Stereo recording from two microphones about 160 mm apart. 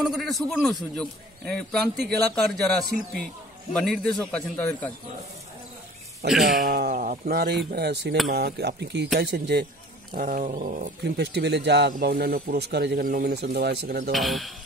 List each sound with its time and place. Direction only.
0.0 s a man's voice: centre (ahead or behind)
6.2 s a man's voice: centre (ahead or behind)
6.6 s speech: 70° right (ahead or behind); by 9.7 s 90° right
10.1 s speech: 60° right (ahead or behind); by 14.1 s 80° right
14.1 s a man's voice: centre (ahead or behind)